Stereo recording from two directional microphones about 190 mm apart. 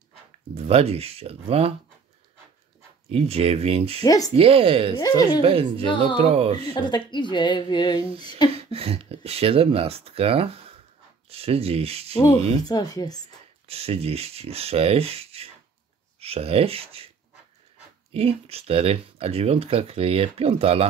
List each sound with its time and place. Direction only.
0.7 s speech: 30° right (ahead or behind)
3.1 s speech: 30° right (ahead or behind)
4.0 s speech: 20° left (ahead or behind)
4.4 s a woman's voice: 30° right (ahead or behind)
6.6 s speech: 25° left (ahead or behind)
8.5 s speech: 30° right (ahead or behind)
12.6 s speech: 20° left (ahead or behind)
13.7 s speech: 30° right (ahead or behind)
18.1 s speech: 30° right (ahead or behind)